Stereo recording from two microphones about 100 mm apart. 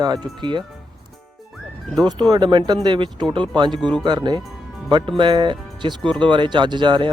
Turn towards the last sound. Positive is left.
turn(degrees=-50)  # may be behind; listen again after turning